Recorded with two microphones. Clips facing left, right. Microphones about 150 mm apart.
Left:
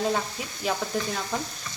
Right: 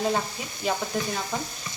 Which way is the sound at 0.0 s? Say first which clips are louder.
Even; centre (ahead or behind).